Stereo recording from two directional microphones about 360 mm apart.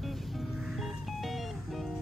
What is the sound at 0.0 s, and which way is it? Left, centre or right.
Music, centre.